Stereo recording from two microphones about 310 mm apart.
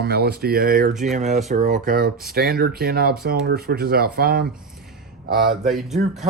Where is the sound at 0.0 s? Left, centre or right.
Right.